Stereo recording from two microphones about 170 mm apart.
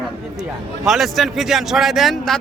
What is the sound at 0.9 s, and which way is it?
Speech, centre (ahead or behind).